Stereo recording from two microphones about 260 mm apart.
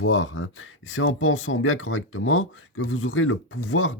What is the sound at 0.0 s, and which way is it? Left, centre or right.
Speech, left.